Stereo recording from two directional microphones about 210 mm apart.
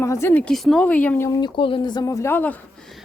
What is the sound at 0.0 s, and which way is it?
Speech, 10° left (ahead or behind).